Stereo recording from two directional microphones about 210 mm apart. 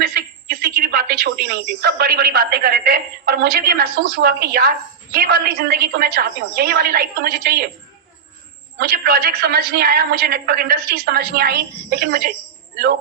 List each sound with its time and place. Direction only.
0.0 s a woman's voice: 45° right (ahead or behind)
8.8 s a woman's voice: 45° right (ahead or behind)